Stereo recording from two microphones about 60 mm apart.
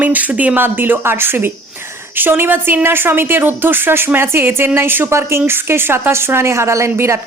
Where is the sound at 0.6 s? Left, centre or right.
Right.